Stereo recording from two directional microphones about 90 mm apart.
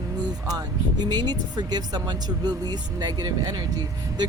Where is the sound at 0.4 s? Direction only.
50° right (ahead or behind).